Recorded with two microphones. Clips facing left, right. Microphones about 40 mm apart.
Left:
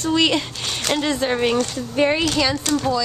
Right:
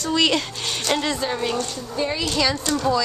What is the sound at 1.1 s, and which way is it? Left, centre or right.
Speech, left.